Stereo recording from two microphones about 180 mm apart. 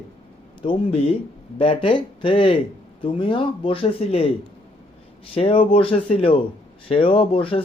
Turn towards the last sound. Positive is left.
turn(degrees=30)  # may be behind; listen again after turning